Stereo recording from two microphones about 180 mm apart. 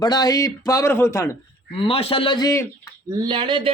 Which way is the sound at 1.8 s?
30° left (ahead or behind).